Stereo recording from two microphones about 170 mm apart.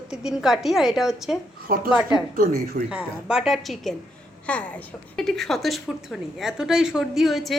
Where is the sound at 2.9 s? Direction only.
5° right (ahead or behind).